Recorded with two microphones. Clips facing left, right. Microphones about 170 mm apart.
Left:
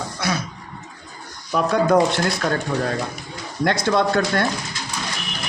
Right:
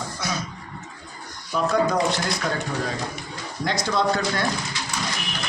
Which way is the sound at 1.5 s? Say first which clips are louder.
Left 5 dB; 60° left (ahead or behind).